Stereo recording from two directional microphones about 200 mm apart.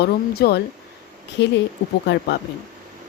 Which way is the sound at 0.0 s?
55° left (ahead or behind).